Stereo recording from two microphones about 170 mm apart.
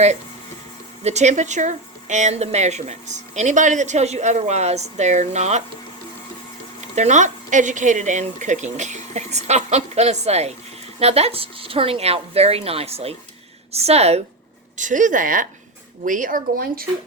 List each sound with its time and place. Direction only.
1.0 s speech: 40° right (ahead or behind)
6.9 s a woman's voice: 45° right (ahead or behind)
14.8 s speech: 50° right (ahead or behind)